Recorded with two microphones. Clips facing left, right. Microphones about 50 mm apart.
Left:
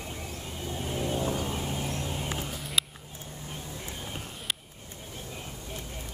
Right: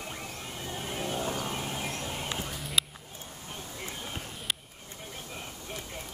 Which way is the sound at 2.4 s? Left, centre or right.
Centre.